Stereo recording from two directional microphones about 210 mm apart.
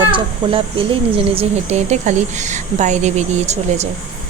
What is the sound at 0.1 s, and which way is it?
Speech, 25° right (ahead or behind).